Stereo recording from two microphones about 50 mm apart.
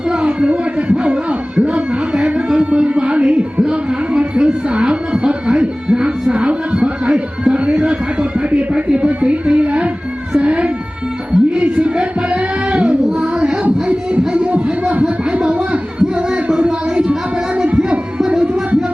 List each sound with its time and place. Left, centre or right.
0.1 s a sound: centre
10.3 s cat: right
11.3 s music: right
13.1 s child singing: centre
13.8 s a sound: right
15.0 s music: centre